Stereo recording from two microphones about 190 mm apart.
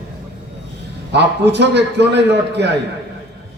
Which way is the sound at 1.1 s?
65° right (ahead or behind).